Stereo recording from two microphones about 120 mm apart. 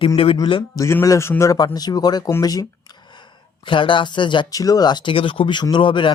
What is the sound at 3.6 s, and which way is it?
Speech, 45° left (ahead or behind).